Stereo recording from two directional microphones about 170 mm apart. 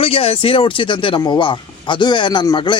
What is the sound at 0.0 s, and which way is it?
Speech, 35° left (ahead or behind).